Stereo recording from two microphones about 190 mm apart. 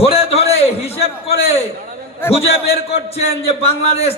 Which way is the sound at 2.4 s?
30° left (ahead or behind).